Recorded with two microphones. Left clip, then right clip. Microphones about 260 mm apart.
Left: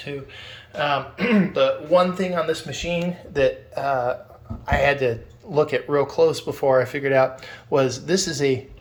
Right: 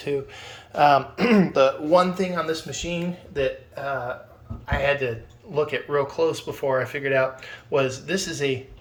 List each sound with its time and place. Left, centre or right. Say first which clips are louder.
0.8 s a man's voice: right 5 dB; centre
2.3 s speech: left 3 dB; centre
3.3 s speech: left 5 dB; centre